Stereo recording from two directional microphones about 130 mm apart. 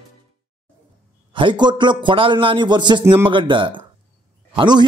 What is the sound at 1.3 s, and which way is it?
A man's voice, 40° right (ahead or behind).